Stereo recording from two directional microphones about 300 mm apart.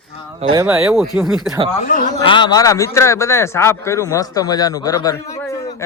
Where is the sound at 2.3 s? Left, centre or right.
Centre.